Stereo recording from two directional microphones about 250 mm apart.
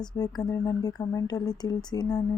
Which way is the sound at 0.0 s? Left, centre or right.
Centre.